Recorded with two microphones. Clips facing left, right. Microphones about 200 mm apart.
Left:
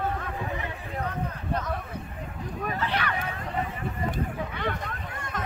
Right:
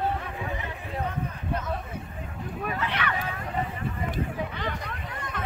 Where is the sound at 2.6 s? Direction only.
35° left (ahead or behind).